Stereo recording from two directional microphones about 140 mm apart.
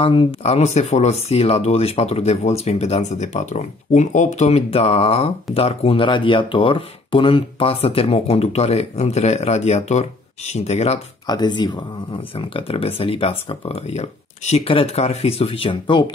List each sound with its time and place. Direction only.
0.0 s speech: 45° left (ahead or behind)
11.2 s speech: 30° left (ahead or behind)
12.4 s speech: 40° left (ahead or behind)